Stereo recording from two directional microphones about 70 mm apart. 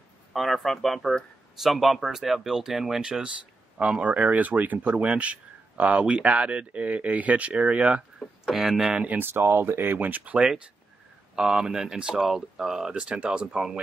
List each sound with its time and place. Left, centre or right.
0.3 s speech: centre
3.1 s speech: centre
8.2 s speech: centre
9.0 s speech: right
9.3 s speech: right
11.3 s speech: centre